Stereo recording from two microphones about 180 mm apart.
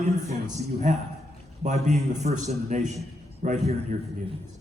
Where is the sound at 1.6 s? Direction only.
40° right (ahead or behind).